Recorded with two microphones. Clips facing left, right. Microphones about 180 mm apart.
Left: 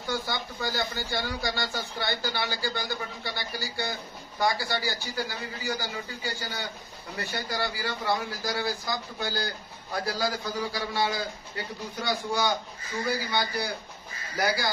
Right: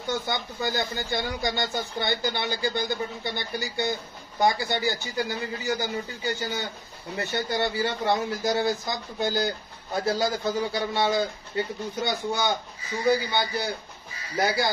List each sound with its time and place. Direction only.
0.0 s speech: 20° right (ahead or behind)